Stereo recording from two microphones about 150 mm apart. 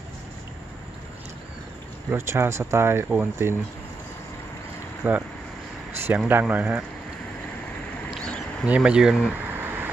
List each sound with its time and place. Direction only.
2.0 s speech: 15° right (ahead or behind)
5.0 s speech: 10° right (ahead or behind)
8.1 s a sound: 5° left (ahead or behind)
8.6 s speech: 5° right (ahead or behind)
9.6 s vehicle: 15° right (ahead or behind)